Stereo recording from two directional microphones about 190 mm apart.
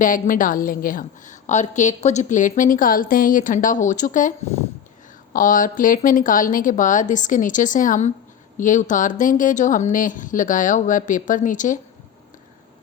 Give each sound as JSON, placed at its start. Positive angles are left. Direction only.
{"t": 0.0, "sound": "a woman's voice", "side_deg": 45}